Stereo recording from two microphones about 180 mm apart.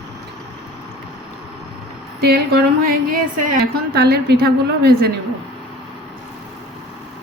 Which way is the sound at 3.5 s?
65° right (ahead or behind).